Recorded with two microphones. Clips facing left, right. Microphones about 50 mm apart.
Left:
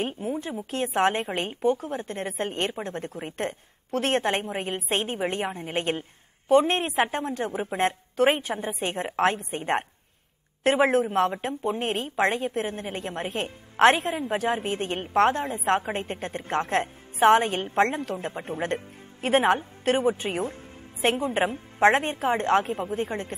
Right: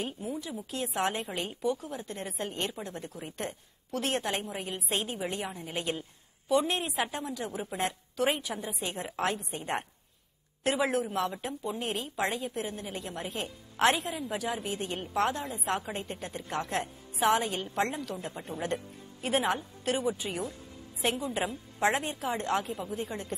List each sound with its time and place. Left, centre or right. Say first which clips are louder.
0.0 s speech: left 6 dB; left